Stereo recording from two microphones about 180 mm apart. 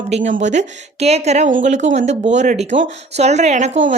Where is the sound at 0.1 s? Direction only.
45° right (ahead or behind).